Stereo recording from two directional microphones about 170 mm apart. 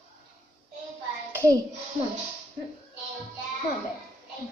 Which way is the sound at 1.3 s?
15° right (ahead or behind).